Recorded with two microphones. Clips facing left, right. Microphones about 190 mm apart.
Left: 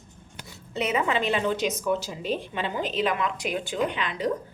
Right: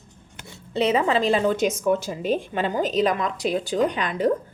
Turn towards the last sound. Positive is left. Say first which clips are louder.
# right 5 dB
turn(degrees=-45)  # may be behind; listen again after turning